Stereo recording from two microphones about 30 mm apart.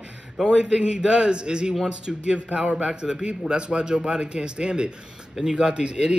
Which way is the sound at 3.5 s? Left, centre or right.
Right.